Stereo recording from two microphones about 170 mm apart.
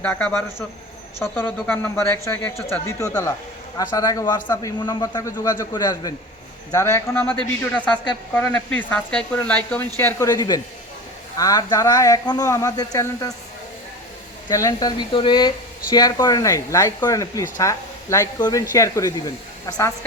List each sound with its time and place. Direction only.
0.0 s a man's voice: 10° left (ahead or behind)
14.4 s speech: 20° left (ahead or behind)